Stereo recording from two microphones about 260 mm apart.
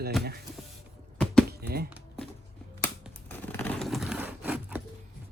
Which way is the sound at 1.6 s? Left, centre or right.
Right.